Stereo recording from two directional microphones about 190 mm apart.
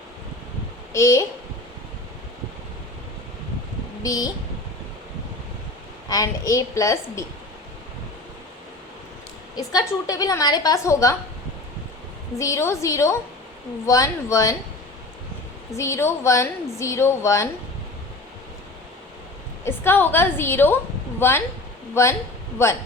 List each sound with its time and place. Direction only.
0.9 s a woman's voice: 15° left (ahead or behind)
4.0 s a woman's voice: 20° left (ahead or behind)
6.1 s a woman's voice: 15° left (ahead or behind)
9.6 s a woman's voice: 20° left (ahead or behind)
12.4 s a woman's voice: 15° left (ahead or behind)
15.7 s a woman's voice: 15° left (ahead or behind)
19.6 s a woman's voice: 10° left (ahead or behind)